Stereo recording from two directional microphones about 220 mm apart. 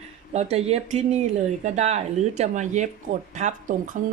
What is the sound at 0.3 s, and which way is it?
Speech, 30° right (ahead or behind).